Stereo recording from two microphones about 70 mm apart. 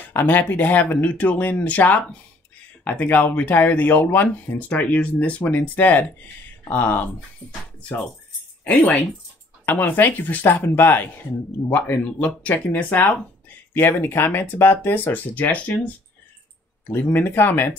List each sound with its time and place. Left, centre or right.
0.1 s speech: left
8.6 s speech: left
16.8 s speech: left